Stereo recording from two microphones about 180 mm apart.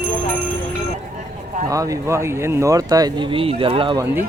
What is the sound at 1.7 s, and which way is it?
Speech, 20° right (ahead or behind).